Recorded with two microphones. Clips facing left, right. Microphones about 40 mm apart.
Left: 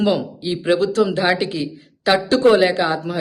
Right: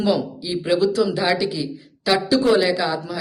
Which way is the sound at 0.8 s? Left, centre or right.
Left.